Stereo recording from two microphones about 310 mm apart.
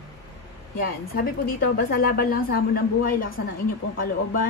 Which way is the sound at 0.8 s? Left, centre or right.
Left.